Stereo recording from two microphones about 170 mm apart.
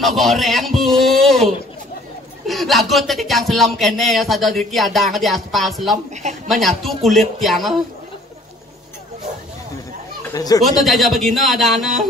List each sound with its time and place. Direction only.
0.0 s speech: centre (ahead or behind)
10.3 s speech: 20° left (ahead or behind)
10.6 s speech: centre (ahead or behind)